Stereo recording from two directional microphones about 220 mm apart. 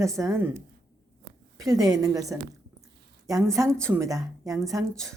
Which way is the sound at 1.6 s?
15° right (ahead or behind).